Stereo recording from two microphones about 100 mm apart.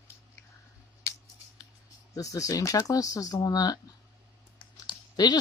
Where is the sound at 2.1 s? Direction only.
35° left (ahead or behind).